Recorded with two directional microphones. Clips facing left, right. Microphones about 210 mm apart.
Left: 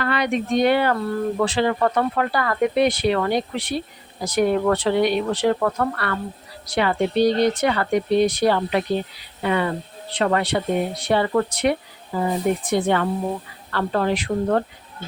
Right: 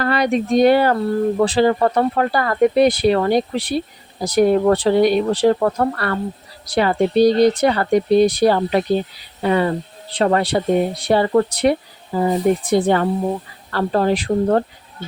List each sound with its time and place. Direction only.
0.0 s speech: 40° right (ahead or behind)